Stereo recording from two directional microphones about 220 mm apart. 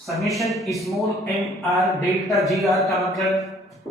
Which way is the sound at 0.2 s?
Centre (ahead or behind).